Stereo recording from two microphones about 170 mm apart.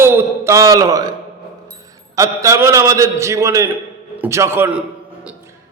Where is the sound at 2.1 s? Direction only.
20° right (ahead or behind).